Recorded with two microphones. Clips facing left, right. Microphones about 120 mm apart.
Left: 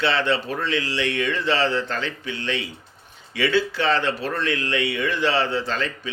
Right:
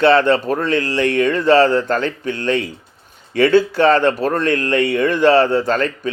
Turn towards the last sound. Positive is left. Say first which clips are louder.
# right 9 dB
turn(degrees=-50)  # may be behind; listen again after turning